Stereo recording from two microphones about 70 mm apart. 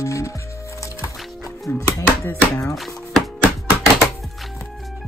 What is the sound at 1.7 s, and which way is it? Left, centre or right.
Music, left.